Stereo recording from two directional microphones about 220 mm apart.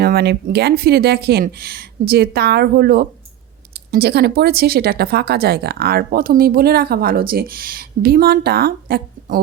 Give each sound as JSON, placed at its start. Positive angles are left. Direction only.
{"t": 0.0, "sound": "speech", "side_deg": -45}